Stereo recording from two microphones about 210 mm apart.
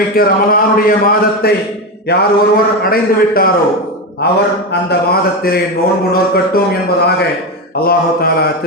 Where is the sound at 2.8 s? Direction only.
45° left (ahead or behind).